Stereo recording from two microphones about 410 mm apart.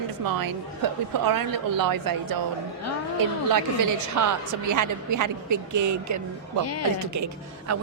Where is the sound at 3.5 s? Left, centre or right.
Right.